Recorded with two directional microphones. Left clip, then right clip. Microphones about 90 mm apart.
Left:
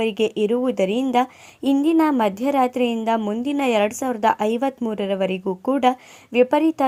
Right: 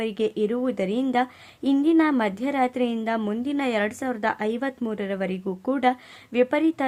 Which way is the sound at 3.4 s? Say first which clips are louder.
Left 6 dB; 35° left (ahead or behind).